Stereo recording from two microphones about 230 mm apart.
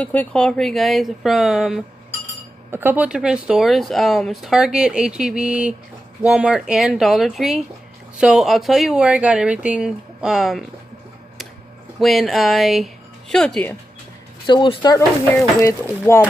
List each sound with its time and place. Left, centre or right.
0.0 s speech: centre
12.0 s speech: centre
14.4 s speech: left